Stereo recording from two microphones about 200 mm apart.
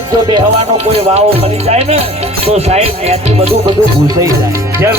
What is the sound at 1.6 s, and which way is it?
Speech, 30° right (ahead or behind).